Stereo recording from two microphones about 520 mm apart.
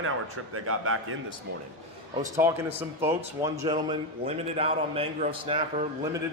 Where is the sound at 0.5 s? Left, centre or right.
Right.